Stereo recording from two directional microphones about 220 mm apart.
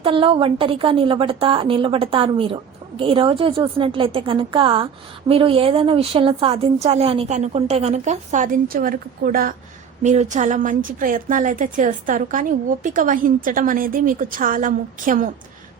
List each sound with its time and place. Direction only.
0.0 s a woman's voice: 25° right (ahead or behind)